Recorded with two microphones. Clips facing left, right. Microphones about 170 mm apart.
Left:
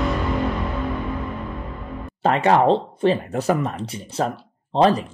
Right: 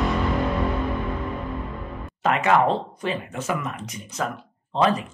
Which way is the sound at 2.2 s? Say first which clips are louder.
Left 3 dB; 30° left (ahead or behind).